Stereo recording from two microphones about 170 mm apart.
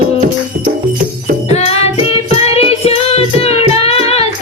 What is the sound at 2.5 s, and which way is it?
Child singing, 35° left (ahead or behind).